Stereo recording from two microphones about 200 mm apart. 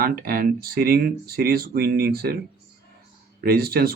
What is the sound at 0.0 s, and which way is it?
Speech, 50° right (ahead or behind).